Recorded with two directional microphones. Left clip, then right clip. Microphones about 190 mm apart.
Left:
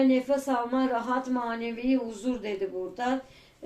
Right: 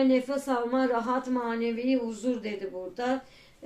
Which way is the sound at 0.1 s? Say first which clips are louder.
Left 1 dB; 30° right (ahead or behind).